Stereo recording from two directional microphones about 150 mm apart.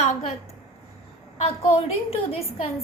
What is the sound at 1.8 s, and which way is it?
Speech, 40° left (ahead or behind).